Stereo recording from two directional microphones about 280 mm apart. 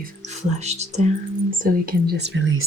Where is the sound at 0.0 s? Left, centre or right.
Right.